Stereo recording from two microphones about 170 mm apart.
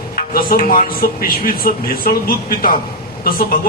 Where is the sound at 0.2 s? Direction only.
55° left (ahead or behind).